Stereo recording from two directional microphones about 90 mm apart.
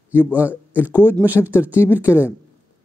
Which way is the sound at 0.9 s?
20° right (ahead or behind).